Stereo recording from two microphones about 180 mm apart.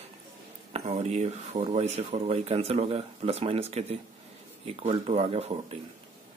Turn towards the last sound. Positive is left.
turn(degrees=-35)  # may be behind; listen again after turning